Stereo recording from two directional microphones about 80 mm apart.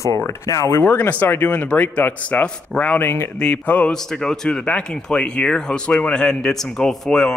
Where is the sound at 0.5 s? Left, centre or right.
Left.